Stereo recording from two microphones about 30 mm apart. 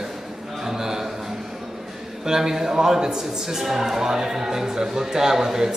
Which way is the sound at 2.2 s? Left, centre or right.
Centre.